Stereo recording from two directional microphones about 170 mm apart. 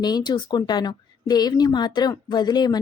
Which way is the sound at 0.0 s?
25° left (ahead or behind).